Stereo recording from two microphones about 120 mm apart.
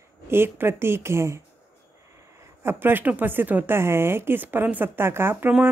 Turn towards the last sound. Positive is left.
turn(degrees=-15)  # may be behind; listen again after turning